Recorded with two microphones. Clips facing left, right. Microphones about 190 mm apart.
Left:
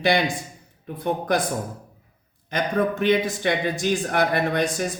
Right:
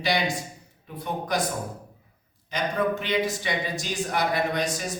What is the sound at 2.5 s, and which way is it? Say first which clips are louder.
Speech: left 3 dB; 50° left (ahead or behind).